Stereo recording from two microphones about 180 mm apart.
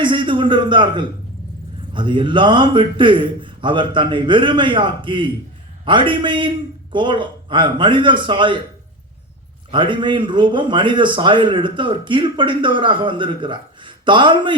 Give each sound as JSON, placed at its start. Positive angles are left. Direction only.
{"t": 0.0, "sound": "a man's voice", "side_deg": -25}
{"t": 9.7, "sound": "a man's voice", "side_deg": -25}